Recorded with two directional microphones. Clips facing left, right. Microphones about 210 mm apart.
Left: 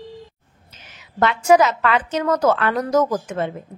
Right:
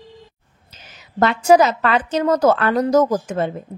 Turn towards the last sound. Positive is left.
turn(degrees=-35)  # may be behind; listen again after turning